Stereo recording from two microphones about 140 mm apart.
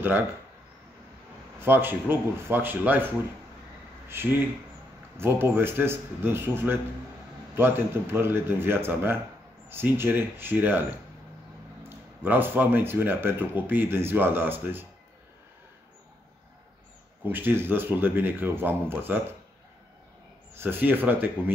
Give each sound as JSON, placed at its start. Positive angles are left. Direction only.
{"t": 1.6, "sound": "speech", "side_deg": -15}
{"t": 4.1, "sound": "speech", "side_deg": -15}
{"t": 12.2, "sound": "speech", "side_deg": -15}
{"t": 17.2, "sound": "speech", "side_deg": -15}
{"t": 20.5, "sound": "speech", "side_deg": -15}